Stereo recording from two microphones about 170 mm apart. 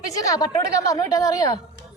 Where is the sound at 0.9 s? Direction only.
20° left (ahead or behind).